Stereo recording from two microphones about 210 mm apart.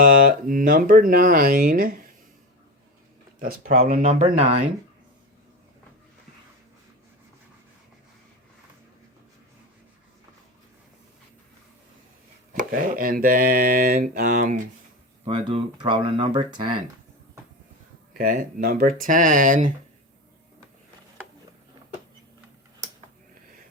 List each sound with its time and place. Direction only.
0.0 s speech: 40° right (ahead or behind)
3.4 s speech: 40° right (ahead or behind)
12.5 s mantra: 45° right (ahead or behind)
15.2 s speech: 25° right (ahead or behind)
18.1 s speech: 45° right (ahead or behind)